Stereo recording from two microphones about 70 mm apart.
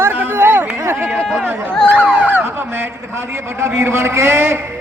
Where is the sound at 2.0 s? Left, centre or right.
Right.